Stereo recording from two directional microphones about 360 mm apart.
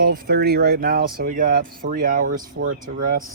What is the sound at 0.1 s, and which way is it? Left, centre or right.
Speech, right.